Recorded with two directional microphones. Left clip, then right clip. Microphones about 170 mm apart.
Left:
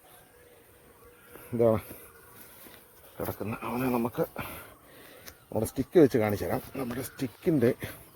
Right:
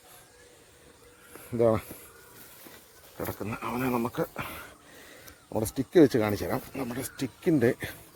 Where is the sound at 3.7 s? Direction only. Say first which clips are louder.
Even; 15° right (ahead or behind).